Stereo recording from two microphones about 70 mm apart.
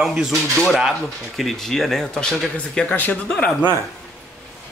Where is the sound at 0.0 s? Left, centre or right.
Centre.